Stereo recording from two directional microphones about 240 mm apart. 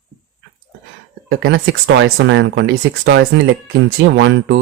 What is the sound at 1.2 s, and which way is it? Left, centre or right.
Speech, right.